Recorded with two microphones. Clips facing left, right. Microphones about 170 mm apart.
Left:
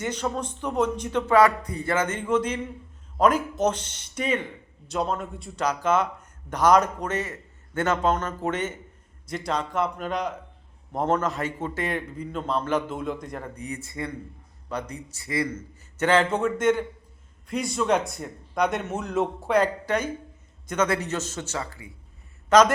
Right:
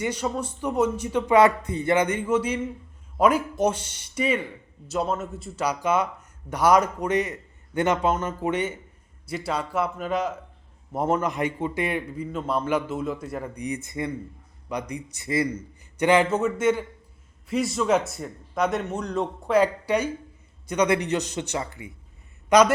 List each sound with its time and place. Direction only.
0.0 s a man's voice: 10° right (ahead or behind)
1.4 s a man's voice: 25° right (ahead or behind)
16.0 s a man's voice: 15° right (ahead or behind)
19.6 s a man's voice: 10° right (ahead or behind)